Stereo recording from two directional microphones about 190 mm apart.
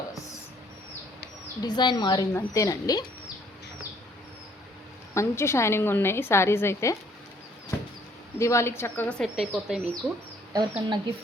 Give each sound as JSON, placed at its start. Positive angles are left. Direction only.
{"t": 1.6, "sound": "a woman's voice", "side_deg": 25}
{"t": 5.1, "sound": "a woman's voice", "side_deg": 15}
{"t": 8.4, "sound": "a woman's voice", "side_deg": 15}
{"t": 10.5, "sound": "speech", "side_deg": -20}